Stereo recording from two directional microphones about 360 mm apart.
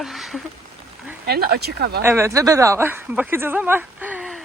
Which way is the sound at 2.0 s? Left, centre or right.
Centre.